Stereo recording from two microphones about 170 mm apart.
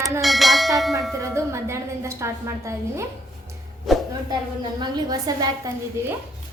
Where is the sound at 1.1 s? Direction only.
15° right (ahead or behind).